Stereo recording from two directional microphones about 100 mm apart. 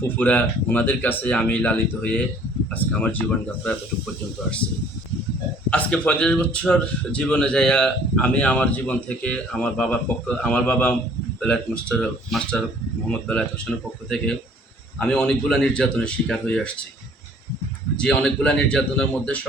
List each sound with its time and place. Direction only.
0.2 s a man's voice: 15° left (ahead or behind)
5.7 s a man's voice: 10° left (ahead or behind)
17.9 s a man's voice: 10° left (ahead or behind)